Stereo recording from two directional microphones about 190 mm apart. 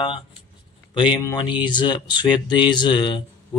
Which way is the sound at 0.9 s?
25° left (ahead or behind).